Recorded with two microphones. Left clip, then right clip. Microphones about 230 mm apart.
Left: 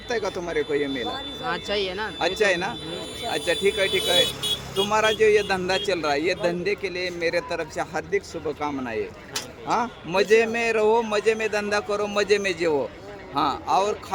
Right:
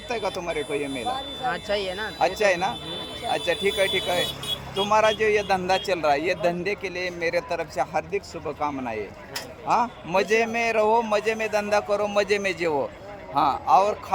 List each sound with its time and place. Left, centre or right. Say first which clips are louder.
0.1 s a man's voice: left 1 dB; centre
1.5 s speech: even; centre
2.1 s a man's voice: right 1 dB; centre
4.4 s vehicle: left 4 dB; left
4.8 s a man's voice: even; centre